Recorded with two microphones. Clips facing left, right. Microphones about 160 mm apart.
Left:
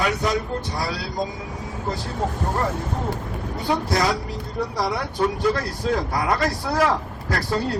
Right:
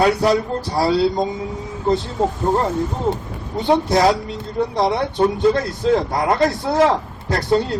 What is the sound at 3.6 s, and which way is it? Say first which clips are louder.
A woman's voice: right 7 dB; 25° right (ahead or behind).